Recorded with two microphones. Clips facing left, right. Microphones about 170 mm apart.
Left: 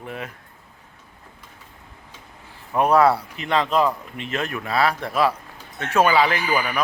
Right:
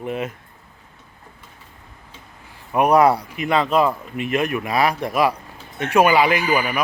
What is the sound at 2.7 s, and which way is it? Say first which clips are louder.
Speech: right 2 dB; 15° right (ahead or behind).